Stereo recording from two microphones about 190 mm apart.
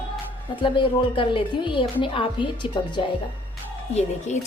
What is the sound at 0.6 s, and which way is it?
Speech, 25° left (ahead or behind).